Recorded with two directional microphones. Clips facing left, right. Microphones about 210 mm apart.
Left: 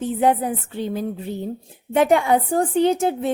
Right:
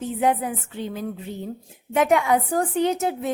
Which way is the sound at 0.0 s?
35° left (ahead or behind).